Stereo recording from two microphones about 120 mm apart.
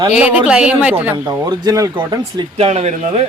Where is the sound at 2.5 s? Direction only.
65° right (ahead or behind).